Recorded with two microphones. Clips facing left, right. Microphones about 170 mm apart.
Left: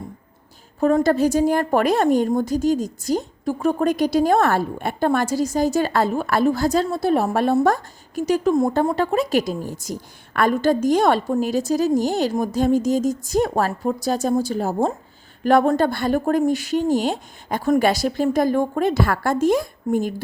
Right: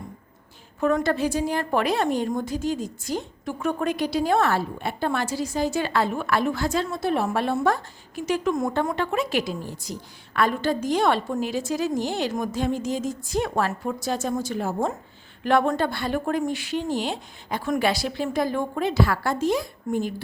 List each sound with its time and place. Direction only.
0.8 s a woman's voice: 35° left (ahead or behind)